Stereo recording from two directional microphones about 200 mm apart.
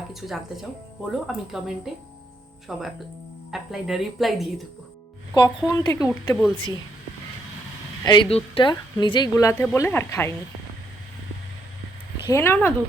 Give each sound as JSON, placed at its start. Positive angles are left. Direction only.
{"t": 0.1, "sound": "speech", "side_deg": 0}
{"t": 5.3, "sound": "a woman's voice", "side_deg": 20}
{"t": 8.0, "sound": "a woman's voice", "side_deg": 25}
{"t": 12.3, "sound": "a woman's voice", "side_deg": 10}